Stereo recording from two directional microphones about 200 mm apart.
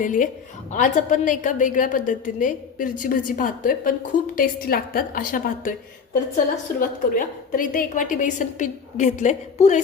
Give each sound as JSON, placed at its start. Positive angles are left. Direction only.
{"t": 0.0, "sound": "a woman's voice", "side_deg": 40}
{"t": 6.7, "sound": "a woman's voice", "side_deg": 45}